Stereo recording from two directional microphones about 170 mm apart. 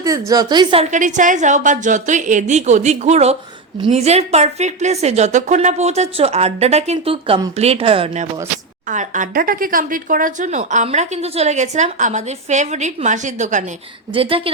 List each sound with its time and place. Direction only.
0.0 s a woman's voice: 20° right (ahead or behind)
0.9 s a woman's voice: 45° right (ahead or behind)
8.9 s a woman's voice: 45° right (ahead or behind)
14.1 s a woman's voice: 30° right (ahead or behind)